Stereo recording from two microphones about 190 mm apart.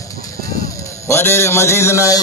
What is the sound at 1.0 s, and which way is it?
A man's voice, 15° left (ahead or behind).